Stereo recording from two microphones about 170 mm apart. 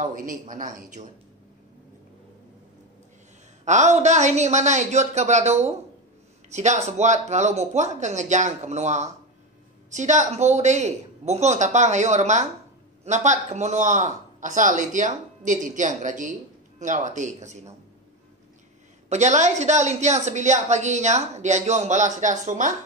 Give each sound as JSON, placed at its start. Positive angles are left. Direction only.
{"t": 0.0, "sound": "a woman's voice", "side_deg": -50}
{"t": 3.6, "sound": "a woman's voice", "side_deg": -45}
{"t": 19.0, "sound": "a woman's voice", "side_deg": -45}